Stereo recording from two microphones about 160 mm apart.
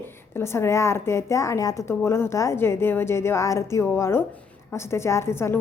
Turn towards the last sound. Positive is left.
turn(degrees=15)  # may be behind; listen again after turning